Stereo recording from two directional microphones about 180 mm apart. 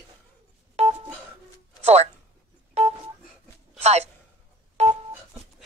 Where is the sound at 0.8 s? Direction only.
35° right (ahead or behind).